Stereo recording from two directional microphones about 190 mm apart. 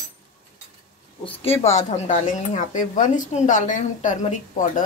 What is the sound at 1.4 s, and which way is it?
Speech, 35° left (ahead or behind).